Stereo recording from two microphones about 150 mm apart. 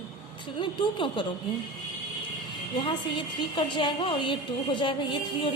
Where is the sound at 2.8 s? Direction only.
35° left (ahead or behind).